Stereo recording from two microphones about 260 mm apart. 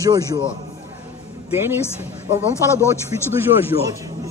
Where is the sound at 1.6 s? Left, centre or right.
Centre.